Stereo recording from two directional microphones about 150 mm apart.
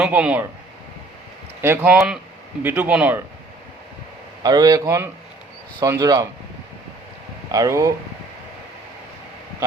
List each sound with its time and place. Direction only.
0.0 s speech: 10° right (ahead or behind)
1.6 s speech: 15° right (ahead or behind)
4.4 s speech: 25° right (ahead or behind)
7.5 s speech: 20° right (ahead or behind)